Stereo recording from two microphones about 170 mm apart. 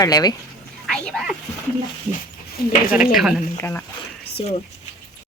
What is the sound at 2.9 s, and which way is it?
Speech, 5° right (ahead or behind).